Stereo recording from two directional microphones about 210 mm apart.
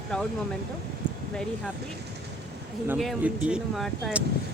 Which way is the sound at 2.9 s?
5° right (ahead or behind).